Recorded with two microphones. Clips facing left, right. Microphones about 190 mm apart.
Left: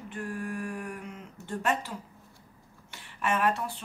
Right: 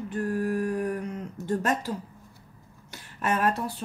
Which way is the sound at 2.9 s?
40° right (ahead or behind).